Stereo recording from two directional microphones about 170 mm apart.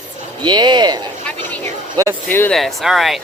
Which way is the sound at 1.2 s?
10° left (ahead or behind).